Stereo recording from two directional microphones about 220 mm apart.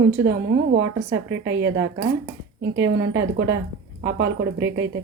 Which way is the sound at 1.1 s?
55° right (ahead or behind).